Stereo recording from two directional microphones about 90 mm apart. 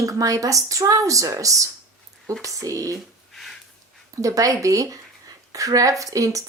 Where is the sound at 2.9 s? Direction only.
Centre (ahead or behind).